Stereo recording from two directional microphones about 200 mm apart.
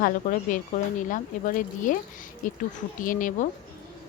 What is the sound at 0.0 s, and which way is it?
Speech, 40° left (ahead or behind).